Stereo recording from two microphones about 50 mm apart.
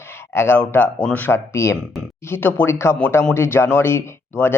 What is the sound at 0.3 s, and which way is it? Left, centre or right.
Speech, left.